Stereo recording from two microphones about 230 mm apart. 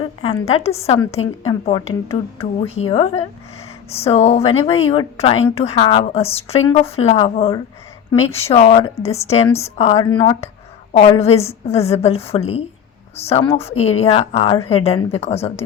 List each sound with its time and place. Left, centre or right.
0.0 s a woman's voice: left